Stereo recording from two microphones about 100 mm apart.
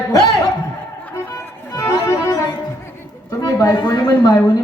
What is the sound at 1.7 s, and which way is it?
Music, 35° left (ahead or behind).